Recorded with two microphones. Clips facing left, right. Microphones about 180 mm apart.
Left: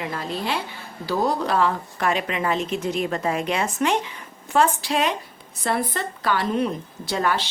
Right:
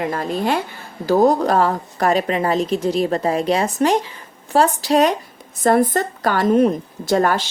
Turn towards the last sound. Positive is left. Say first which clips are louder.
# right 7 dB
turn(degrees=-45)  # may be behind; listen again after turning